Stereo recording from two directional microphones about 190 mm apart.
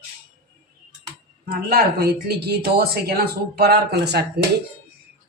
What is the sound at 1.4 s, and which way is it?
A woman's voice, 55° right (ahead or behind).